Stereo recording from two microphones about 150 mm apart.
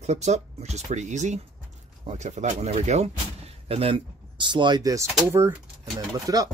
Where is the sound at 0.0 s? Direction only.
50° right (ahead or behind).